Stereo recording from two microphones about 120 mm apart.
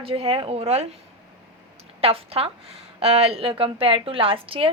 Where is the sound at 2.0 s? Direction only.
55° right (ahead or behind).